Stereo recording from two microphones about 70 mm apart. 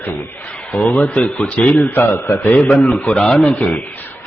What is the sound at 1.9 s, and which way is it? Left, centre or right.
Speech, left.